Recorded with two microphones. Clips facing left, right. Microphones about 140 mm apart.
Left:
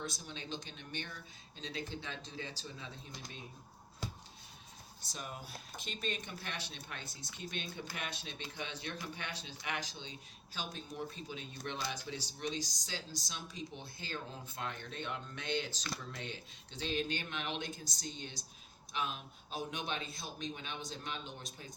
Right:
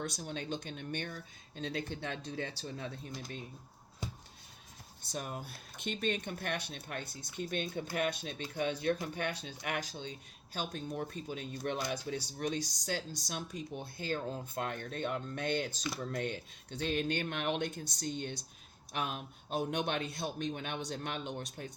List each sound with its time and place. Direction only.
0.0 s speech: 55° right (ahead or behind)
5.1 s speech: 50° right (ahead or behind)